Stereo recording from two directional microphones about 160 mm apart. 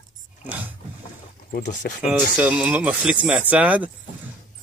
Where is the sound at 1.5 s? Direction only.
55° left (ahead or behind).